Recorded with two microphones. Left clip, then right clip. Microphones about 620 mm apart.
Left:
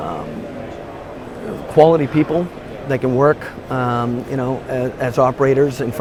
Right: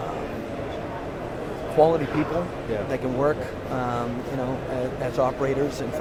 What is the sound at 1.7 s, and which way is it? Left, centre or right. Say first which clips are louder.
Speech: left 8 dB; left.